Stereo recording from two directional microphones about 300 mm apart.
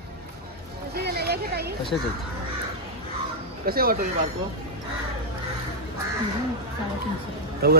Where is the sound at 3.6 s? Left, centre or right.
Right.